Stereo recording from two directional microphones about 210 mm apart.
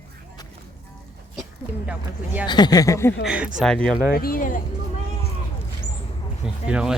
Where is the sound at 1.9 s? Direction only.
5° right (ahead or behind).